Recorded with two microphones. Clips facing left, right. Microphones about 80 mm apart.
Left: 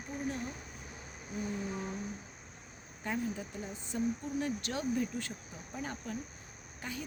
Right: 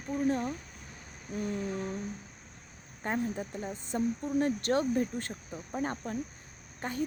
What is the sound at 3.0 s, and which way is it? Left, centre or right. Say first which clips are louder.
Speech: right 4 dB; right.